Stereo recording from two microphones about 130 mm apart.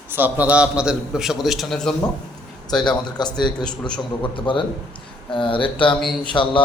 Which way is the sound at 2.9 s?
35° left (ahead or behind).